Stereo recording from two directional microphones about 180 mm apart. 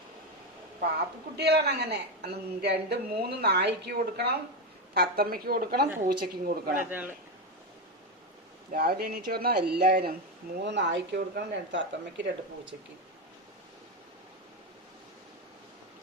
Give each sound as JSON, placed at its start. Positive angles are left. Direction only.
{"t": 0.8, "sound": "a woman's voice", "side_deg": -65}
{"t": 8.7, "sound": "a woman's voice", "side_deg": -60}
{"t": 10.6, "sound": "speech", "side_deg": -75}